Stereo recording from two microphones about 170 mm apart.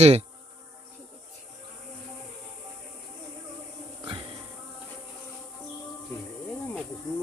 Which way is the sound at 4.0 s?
30° right (ahead or behind).